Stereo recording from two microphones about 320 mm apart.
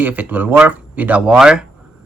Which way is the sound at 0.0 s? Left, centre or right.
Centre.